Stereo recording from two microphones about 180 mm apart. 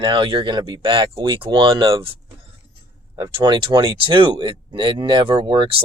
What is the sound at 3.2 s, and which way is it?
Speech, 25° right (ahead or behind).